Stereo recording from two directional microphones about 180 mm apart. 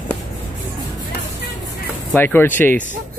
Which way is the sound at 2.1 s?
10° left (ahead or behind).